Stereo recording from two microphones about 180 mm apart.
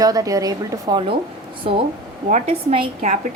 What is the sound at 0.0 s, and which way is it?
A woman's voice, 20° right (ahead or behind).